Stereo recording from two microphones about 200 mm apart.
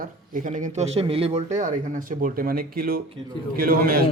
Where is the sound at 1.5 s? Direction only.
40° right (ahead or behind).